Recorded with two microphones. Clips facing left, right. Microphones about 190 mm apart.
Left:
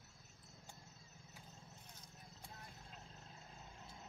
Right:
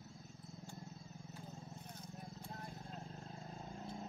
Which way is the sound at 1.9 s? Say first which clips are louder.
Right 10 dB; 55° right (ahead or behind).